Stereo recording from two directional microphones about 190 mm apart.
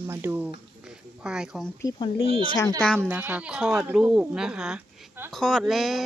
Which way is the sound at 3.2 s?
10° right (ahead or behind).